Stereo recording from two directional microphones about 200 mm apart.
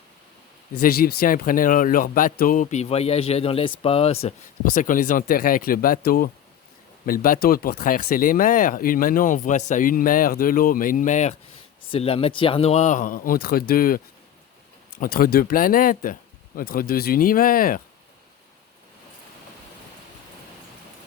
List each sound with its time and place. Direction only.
0.8 s speech: 50° left (ahead or behind); by 4.4 s 30° left (ahead or behind)
4.6 s speech: 40° left (ahead or behind)